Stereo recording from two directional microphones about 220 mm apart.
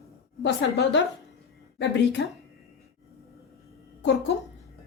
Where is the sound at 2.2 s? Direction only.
55° left (ahead or behind).